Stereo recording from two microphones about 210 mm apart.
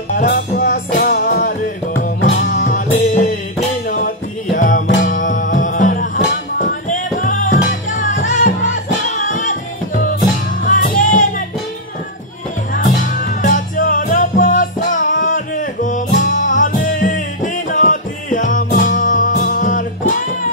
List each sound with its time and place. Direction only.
0.3 s music: 40° left (ahead or behind)
4.6 s music: 40° left (ahead or behind)
13.1 s music: 40° left (ahead or behind)